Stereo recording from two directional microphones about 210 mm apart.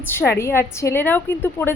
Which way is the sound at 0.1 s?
10° left (ahead or behind).